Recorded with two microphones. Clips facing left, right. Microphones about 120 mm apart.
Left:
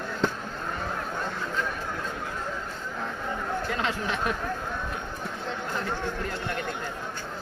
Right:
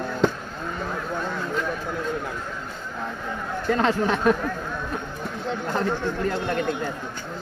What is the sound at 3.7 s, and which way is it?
Speech, 40° right (ahead or behind).